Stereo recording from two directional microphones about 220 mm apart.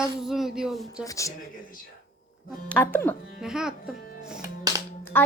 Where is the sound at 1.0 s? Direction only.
15° left (ahead or behind).